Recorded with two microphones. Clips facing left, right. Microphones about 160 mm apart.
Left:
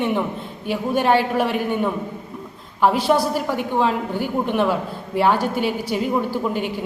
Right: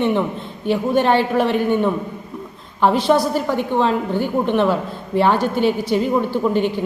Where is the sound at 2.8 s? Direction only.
10° left (ahead or behind).